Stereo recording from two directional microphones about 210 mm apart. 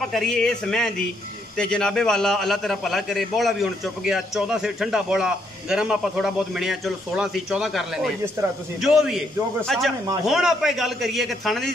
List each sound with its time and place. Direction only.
0.0 s a man's voice: centre (ahead or behind)